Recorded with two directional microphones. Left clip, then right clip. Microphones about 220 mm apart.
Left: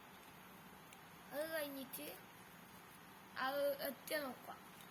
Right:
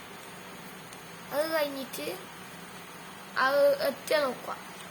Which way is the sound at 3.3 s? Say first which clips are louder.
Right 16 dB; 20° right (ahead or behind).